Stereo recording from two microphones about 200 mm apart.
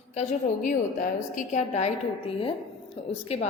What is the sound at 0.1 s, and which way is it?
A woman's voice, 35° left (ahead or behind).